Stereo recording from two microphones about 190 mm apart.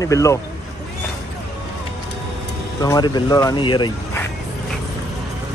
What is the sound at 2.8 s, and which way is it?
Speech, 20° left (ahead or behind).